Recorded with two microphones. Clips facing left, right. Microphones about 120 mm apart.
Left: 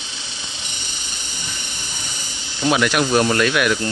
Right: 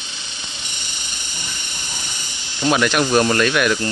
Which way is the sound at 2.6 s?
5° left (ahead or behind).